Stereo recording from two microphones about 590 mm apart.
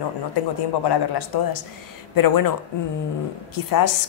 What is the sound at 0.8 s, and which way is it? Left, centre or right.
Speech, left.